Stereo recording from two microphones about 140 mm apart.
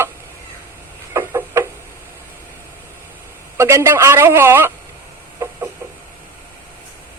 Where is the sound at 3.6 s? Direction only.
20° right (ahead or behind).